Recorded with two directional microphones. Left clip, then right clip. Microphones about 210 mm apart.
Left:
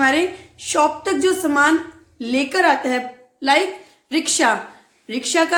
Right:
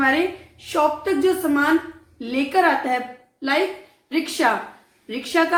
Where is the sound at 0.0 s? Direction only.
50° left (ahead or behind).